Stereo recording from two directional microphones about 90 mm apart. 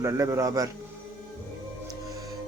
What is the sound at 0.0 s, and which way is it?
Speech, 35° right (ahead or behind).